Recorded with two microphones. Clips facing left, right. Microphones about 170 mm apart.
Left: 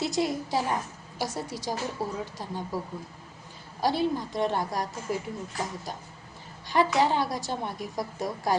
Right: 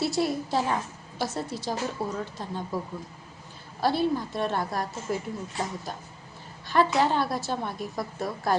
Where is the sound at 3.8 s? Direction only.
15° left (ahead or behind).